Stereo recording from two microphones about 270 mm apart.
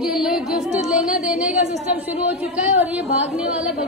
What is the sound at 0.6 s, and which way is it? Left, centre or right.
Music, right.